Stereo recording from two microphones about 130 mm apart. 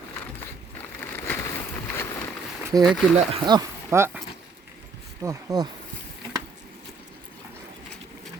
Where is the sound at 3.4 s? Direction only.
35° right (ahead or behind).